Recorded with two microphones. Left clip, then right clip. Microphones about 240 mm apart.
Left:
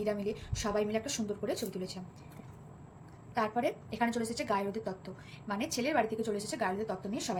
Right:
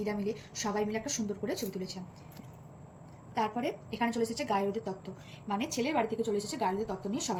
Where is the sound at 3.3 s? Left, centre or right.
Left.